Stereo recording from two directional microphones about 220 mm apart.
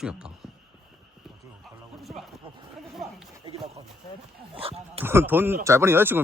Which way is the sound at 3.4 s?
25° right (ahead or behind).